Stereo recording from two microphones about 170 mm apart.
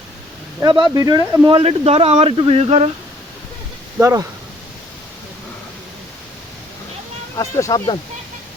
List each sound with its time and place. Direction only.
0.6 s speech: 25° right (ahead or behind)
1.5 s speech: 35° right (ahead or behind)
3.9 s speech: 20° right (ahead or behind)
7.3 s speech: 20° left (ahead or behind)